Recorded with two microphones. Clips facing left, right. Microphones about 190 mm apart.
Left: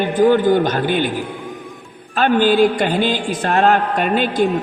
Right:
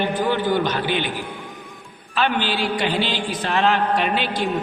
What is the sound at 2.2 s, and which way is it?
A man's voice, 45° left (ahead or behind).